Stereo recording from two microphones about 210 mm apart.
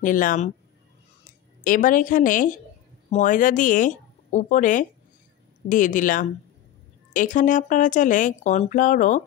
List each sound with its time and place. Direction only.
0.0 s speech: 40° left (ahead or behind)
1.6 s speech: 40° left (ahead or behind)